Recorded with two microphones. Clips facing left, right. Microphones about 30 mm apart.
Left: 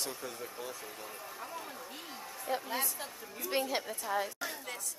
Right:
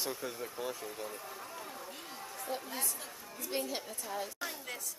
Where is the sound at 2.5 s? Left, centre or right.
Centre.